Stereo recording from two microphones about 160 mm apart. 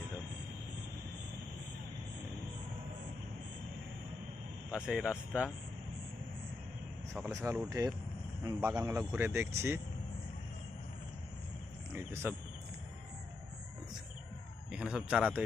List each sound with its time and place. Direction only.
4.7 s speech: 5° right (ahead or behind)
7.3 s speech: 15° right (ahead or behind)
11.9 s speech: 15° right (ahead or behind)
14.7 s a man's voice: 5° right (ahead or behind)